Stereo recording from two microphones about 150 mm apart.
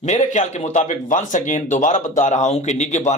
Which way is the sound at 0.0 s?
50° left (ahead or behind).